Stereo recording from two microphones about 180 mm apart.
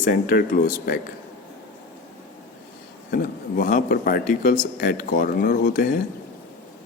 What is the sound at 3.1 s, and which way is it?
Speech, 50° left (ahead or behind).